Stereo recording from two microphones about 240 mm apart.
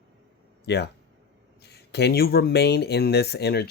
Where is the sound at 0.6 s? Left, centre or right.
Left.